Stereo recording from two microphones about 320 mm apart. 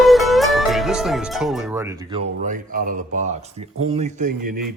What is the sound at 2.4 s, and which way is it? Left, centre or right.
Speech, right.